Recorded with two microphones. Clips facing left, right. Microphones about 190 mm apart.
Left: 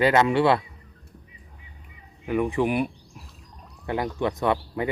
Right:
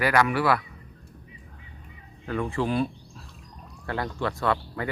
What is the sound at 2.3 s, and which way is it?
Speech, 15° left (ahead or behind).